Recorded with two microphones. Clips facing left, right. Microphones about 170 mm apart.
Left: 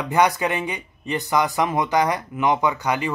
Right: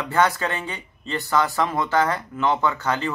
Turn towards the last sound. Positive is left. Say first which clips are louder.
# left 1 dB
turn(degrees=15)  # may be behind; listen again after turning